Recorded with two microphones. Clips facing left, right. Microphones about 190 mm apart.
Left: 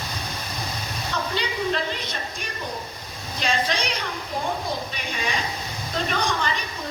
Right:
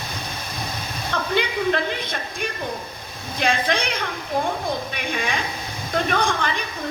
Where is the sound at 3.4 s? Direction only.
55° right (ahead or behind).